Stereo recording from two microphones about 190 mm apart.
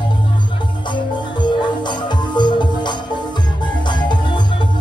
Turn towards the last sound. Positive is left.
turn(degrees=25)  # may be behind; listen again after turning